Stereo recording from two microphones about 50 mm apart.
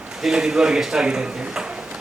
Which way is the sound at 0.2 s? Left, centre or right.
Centre.